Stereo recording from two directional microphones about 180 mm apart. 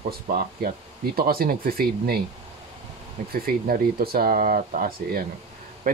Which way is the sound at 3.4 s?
55° right (ahead or behind).